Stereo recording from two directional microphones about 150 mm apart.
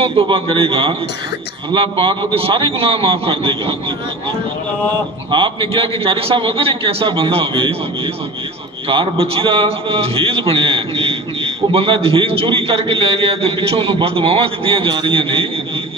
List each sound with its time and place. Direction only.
0.0 s a man's voice: 35° right (ahead or behind)
5.3 s a man's voice: 35° right (ahead or behind)